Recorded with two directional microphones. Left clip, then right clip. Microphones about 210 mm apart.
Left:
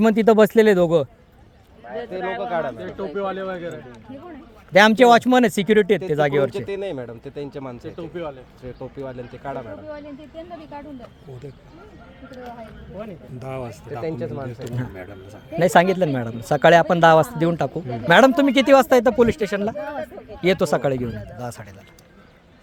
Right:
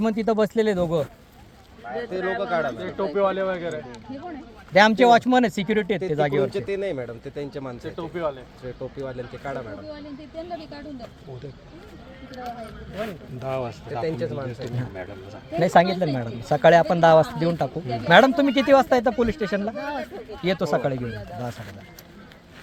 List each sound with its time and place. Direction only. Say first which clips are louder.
0.0 s speech: left 7 dB; 55° left (ahead or behind)
2.0 s speech: even; 15° left (ahead or behind)
4.7 s a man's voice: left 3 dB; 50° left (ahead or behind)
6.7 s speech: right 1 dB; 20° left (ahead or behind)
13.4 s speech: right 4 dB; 35° left (ahead or behind)
14.0 s speech: right 1 dB; 20° left (ahead or behind)
14.8 s a man's voice: even; 40° left (ahead or behind)
19.7 s speech: left 1 dB; centre (ahead or behind)
20.4 s a man's voice: left 4 dB; 50° left (ahead or behind)